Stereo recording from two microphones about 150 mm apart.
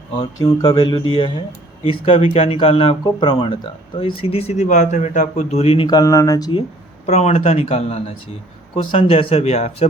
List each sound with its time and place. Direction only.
0.2 s speech: 25° left (ahead or behind)
7.1 s speech: 50° left (ahead or behind)